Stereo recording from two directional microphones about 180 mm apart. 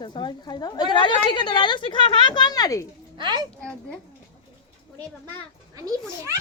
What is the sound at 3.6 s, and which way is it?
Speech, 5° left (ahead or behind).